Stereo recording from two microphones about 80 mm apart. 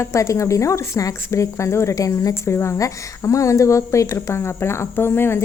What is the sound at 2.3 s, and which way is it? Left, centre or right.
A woman's voice, left.